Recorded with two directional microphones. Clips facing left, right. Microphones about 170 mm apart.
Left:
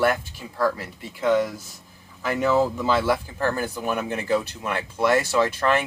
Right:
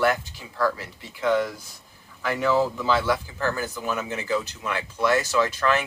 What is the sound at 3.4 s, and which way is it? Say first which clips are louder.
Speech: left 2 dB; 55° left (ahead or behind).